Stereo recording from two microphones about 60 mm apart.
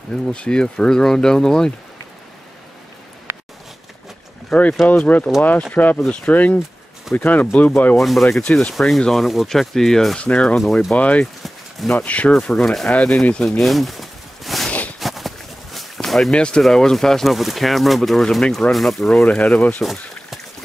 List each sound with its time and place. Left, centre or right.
0.1 s speech: centre
4.5 s speech: centre
4.8 s speech: left
8.0 s speech: centre
10.6 s speech: centre
11.0 s speech: left
12.3 s speech: centre
12.9 s speech: left
13.6 s a sound: centre
16.3 s speech: centre
18.7 s speech: centre
19.2 s speech: left
19.8 s speech: centre